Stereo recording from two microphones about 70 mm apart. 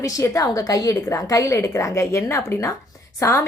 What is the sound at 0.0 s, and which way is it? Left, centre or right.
A woman's voice, left.